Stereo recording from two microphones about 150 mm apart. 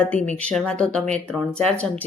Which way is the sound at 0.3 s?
5° left (ahead or behind).